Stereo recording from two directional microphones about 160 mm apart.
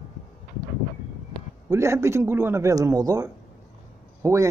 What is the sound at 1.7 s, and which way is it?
Speech, 15° right (ahead or behind).